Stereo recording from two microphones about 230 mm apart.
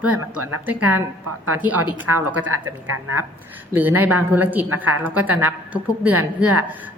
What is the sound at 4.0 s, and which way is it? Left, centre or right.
A woman's voice, centre.